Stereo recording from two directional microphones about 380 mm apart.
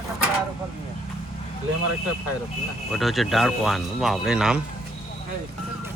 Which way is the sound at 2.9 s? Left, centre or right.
Centre.